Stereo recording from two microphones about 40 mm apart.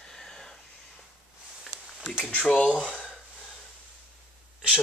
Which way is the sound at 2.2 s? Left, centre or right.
Left.